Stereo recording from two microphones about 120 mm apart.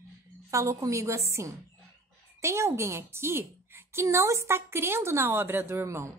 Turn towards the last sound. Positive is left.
turn(degrees=-25)  # may be behind; listen again after turning